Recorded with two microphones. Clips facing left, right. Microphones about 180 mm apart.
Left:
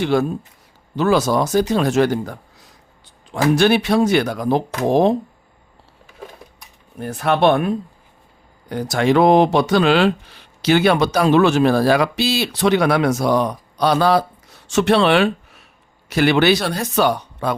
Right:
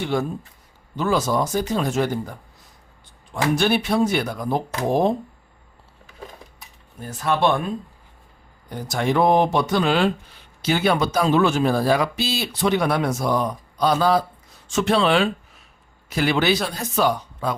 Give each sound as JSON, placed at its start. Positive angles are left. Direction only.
{"t": 0.0, "sound": "speech", "side_deg": 80}
{"t": 7.0, "sound": "speech", "side_deg": 65}
{"t": 8.7, "sound": "speech", "side_deg": 85}